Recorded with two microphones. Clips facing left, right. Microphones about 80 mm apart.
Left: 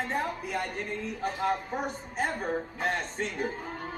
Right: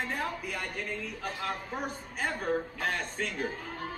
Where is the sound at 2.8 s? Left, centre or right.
Left.